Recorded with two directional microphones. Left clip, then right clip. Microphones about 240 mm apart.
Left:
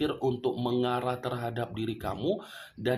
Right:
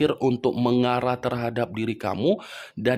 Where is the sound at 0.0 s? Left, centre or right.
Right.